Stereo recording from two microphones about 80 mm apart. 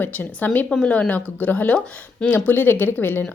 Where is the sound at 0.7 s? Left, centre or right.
Centre.